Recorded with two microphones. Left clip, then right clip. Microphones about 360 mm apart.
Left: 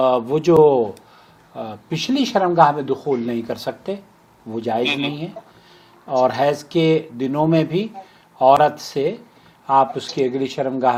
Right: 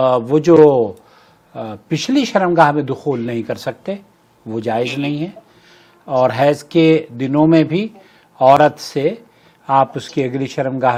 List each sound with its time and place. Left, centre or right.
0.0 s a man's voice: right